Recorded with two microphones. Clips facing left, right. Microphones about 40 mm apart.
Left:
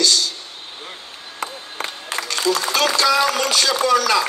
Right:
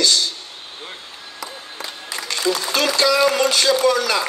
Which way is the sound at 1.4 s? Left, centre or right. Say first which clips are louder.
Left 5 dB; left.